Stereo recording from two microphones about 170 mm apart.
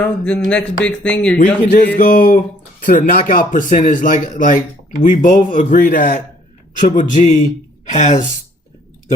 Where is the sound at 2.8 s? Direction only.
50° left (ahead or behind).